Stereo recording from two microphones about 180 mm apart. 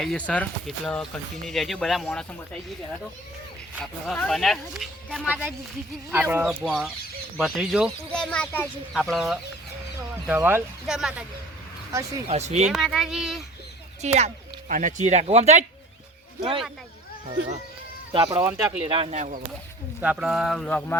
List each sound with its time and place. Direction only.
0.0 s speech: 5° left (ahead or behind)
3.8 s speech: centre (ahead or behind)
5.3 s speech: 10° right (ahead or behind)
10.2 s speech: 10° right (ahead or behind)
12.3 s speech: 40° right (ahead or behind)
12.6 s speech: centre (ahead or behind)
14.0 s speech: 35° right (ahead or behind)
18.1 s speech: 25° right (ahead or behind)
19.1 s speech: 45° right (ahead or behind)
20.0 s speech: 5° right (ahead or behind)